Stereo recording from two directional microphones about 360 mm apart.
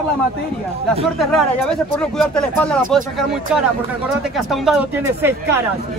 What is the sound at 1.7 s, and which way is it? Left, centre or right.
Speech, centre.